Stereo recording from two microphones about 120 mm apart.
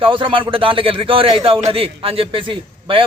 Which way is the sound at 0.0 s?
45° right (ahead or behind).